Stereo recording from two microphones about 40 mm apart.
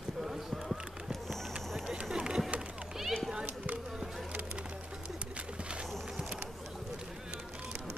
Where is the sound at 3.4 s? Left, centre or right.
Right.